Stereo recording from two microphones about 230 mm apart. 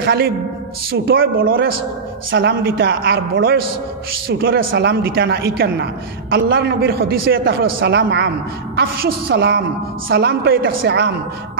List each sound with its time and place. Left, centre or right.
0.0 s a man's voice: right